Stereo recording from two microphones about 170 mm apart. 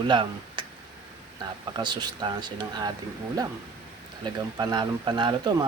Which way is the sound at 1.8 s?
25° right (ahead or behind).